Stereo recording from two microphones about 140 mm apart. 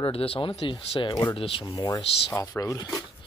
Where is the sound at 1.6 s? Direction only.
30° left (ahead or behind).